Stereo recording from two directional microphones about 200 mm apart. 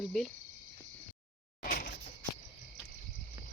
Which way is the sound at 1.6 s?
45° left (ahead or behind).